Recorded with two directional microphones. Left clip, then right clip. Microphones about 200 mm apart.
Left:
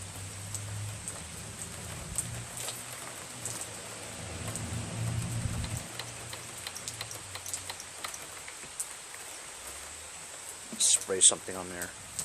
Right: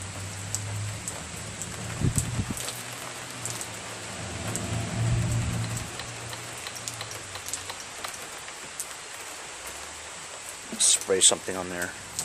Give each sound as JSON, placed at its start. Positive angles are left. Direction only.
{"t": 10.8, "sound": "speech", "side_deg": -15}